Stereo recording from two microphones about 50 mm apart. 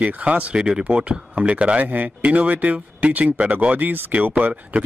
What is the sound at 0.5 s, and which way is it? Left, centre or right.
Speech, centre.